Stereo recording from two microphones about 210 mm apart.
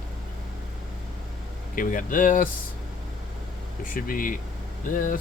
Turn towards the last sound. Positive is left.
turn(degrees=40)  # may be behind; listen again after turning